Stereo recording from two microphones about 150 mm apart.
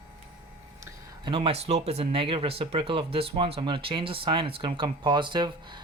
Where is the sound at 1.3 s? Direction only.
35° right (ahead or behind).